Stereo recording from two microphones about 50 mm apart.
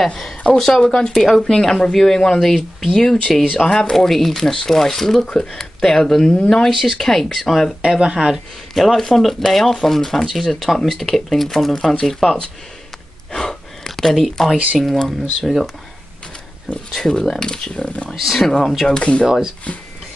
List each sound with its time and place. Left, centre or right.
0.6 s speech: centre
7.9 s speech: centre
8.7 s speech: centre
13.3 s gasp: centre
14.8 s speech: centre
16.7 s speech: centre
18.1 s speech: centre
18.9 s speech: left
19.2 s speech: centre